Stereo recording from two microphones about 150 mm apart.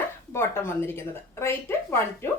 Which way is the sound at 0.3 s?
15° left (ahead or behind).